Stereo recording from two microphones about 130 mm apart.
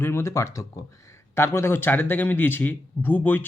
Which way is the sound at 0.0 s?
20° left (ahead or behind).